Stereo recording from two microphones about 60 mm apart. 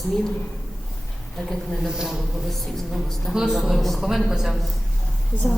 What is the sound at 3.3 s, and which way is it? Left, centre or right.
Speech, centre.